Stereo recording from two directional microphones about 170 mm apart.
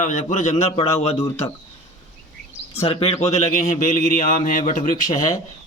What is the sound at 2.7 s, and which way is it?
A man's voice, 35° left (ahead or behind).